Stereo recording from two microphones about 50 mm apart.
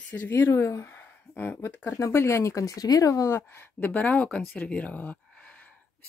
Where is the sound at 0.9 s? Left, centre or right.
Left.